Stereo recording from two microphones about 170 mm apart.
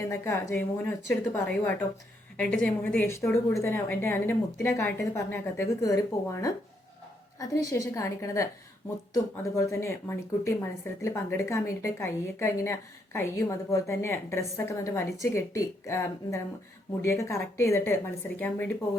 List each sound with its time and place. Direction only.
0.0 s a woman's voice: 20° left (ahead or behind)
7.7 s a woman's voice: 20° left (ahead or behind)